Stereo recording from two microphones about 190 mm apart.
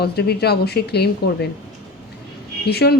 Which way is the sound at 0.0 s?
60° left (ahead or behind).